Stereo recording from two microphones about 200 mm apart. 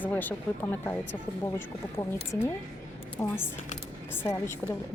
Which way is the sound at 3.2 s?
10° left (ahead or behind).